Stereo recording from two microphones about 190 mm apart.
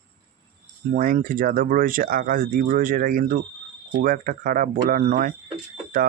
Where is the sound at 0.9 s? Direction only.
45° right (ahead or behind).